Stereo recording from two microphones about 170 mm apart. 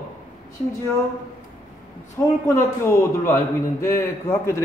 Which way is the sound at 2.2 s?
20° left (ahead or behind).